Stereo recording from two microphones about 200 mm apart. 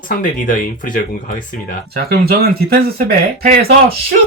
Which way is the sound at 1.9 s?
50° right (ahead or behind).